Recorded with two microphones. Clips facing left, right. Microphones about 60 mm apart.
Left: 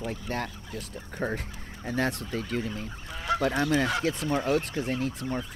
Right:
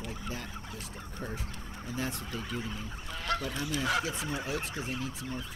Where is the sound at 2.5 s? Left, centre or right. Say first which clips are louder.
Left 6 dB; left.